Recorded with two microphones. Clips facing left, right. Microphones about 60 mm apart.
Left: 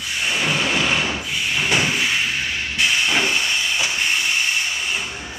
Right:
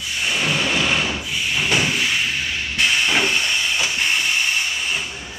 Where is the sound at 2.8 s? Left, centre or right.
Centre.